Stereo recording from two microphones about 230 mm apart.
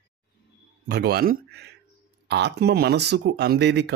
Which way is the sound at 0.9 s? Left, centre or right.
Right.